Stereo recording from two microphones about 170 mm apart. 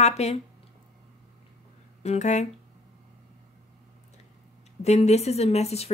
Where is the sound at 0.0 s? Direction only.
40° left (ahead or behind).